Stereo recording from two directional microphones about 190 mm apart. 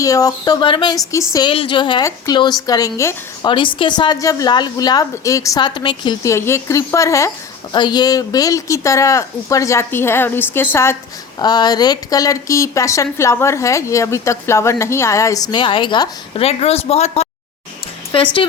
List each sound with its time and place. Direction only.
0.0 s a woman's voice: 20° left (ahead or behind)